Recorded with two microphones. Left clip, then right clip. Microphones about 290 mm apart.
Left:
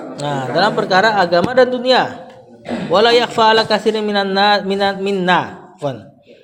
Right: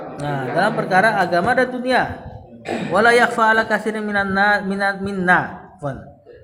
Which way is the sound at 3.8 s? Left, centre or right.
Left.